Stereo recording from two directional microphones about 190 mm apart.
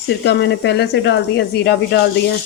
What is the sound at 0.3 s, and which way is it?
Speech, 65° left (ahead or behind).